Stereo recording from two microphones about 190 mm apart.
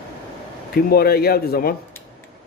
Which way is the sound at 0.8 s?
55° left (ahead or behind).